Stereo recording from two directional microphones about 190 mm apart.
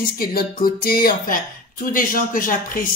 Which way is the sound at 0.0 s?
50° left (ahead or behind).